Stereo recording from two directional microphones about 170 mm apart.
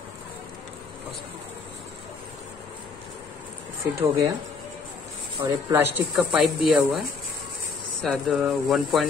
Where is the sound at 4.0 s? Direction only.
15° right (ahead or behind).